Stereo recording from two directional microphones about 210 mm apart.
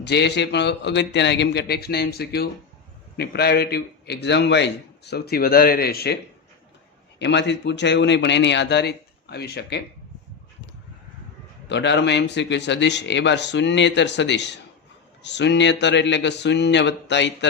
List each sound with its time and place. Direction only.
0.0 s a man's voice: 55° left (ahead or behind)
7.2 s speech: 55° left (ahead or behind)
11.7 s speech: 55° left (ahead or behind)